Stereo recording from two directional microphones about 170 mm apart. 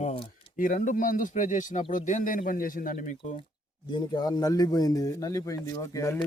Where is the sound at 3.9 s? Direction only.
25° left (ahead or behind).